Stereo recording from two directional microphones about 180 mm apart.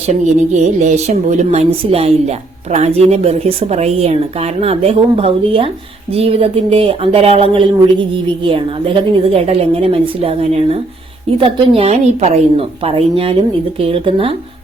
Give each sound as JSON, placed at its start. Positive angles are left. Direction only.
{"t": 0.1, "sound": "speech", "side_deg": -40}